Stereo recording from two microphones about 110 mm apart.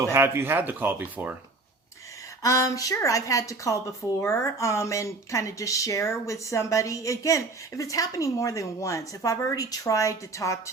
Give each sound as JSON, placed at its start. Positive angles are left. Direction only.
{"t": 0.0, "sound": "speech", "side_deg": -25}
{"t": 2.4, "sound": "speech", "side_deg": 30}